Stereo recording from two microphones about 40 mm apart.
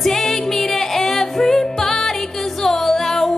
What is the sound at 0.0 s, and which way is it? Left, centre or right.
Music, centre.